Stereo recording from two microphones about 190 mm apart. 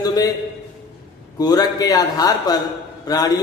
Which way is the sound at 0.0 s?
20° left (ahead or behind).